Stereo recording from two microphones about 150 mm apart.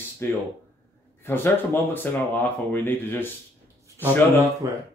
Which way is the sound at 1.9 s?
10° left (ahead or behind).